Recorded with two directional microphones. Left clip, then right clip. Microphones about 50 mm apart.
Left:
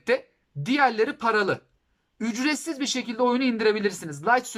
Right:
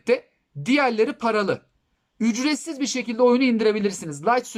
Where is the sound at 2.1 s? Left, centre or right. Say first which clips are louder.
Right 3 dB; right.